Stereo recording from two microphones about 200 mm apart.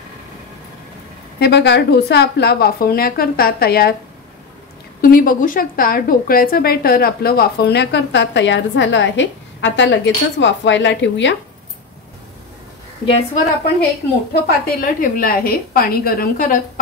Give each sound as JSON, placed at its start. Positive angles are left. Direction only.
{"t": 1.4, "sound": "a woman's voice", "side_deg": 55}
{"t": 5.0, "sound": "a woman's voice", "side_deg": 45}
{"t": 13.0, "sound": "a woman's voice", "side_deg": 30}
{"t": 14.3, "sound": "a woman's voice", "side_deg": 45}